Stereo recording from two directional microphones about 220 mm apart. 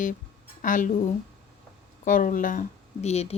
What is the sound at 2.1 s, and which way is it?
Speech, 40° left (ahead or behind).